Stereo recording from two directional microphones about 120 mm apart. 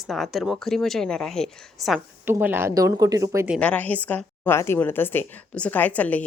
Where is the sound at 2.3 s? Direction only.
15° right (ahead or behind).